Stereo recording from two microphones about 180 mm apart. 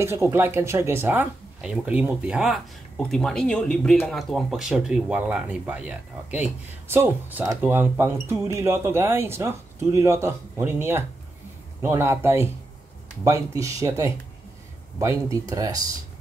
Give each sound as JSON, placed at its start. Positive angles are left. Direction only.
{"t": 0.0, "sound": "speech", "side_deg": -15}